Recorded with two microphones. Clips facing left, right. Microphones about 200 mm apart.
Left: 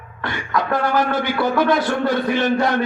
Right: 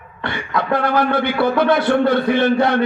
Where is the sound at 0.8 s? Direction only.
60° right (ahead or behind).